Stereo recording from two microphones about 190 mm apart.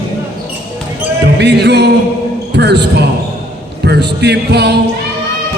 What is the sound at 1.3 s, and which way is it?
Speech, 60° right (ahead or behind).